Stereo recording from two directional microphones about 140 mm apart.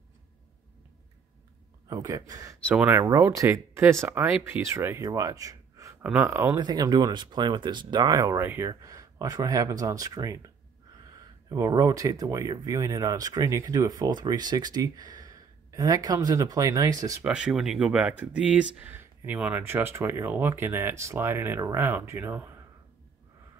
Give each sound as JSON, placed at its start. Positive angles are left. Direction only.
{"t": 1.9, "sound": "speech", "side_deg": -25}
{"t": 6.5, "sound": "speech", "side_deg": -30}
{"t": 17.2, "sound": "speech", "side_deg": -5}